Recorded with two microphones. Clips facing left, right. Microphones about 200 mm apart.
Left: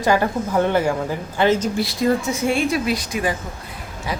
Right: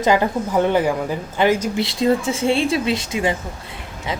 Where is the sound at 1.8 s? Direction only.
25° right (ahead or behind).